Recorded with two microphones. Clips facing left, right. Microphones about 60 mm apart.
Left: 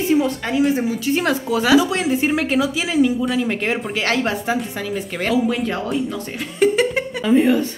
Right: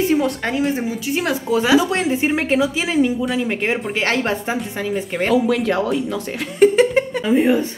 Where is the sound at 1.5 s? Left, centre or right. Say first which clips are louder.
Right 1 dB; right.